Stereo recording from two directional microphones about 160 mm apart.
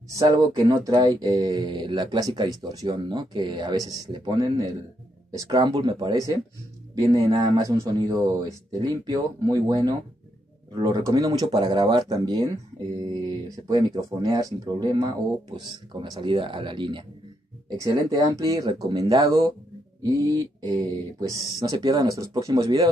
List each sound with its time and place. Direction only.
0.1 s speech: 20° right (ahead or behind)
13.7 s speech: 25° right (ahead or behind)
21.2 s speech: 25° right (ahead or behind)